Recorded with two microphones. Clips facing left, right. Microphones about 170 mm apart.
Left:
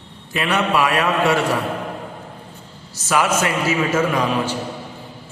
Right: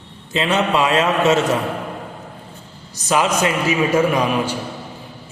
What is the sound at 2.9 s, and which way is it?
A man's voice, 20° right (ahead or behind).